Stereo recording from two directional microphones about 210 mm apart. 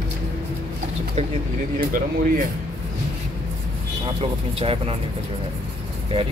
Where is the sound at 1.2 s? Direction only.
30° right (ahead or behind).